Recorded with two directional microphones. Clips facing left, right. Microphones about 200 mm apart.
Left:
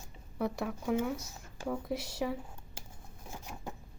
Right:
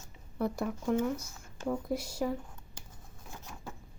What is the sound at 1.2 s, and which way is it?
Speech, 20° left (ahead or behind).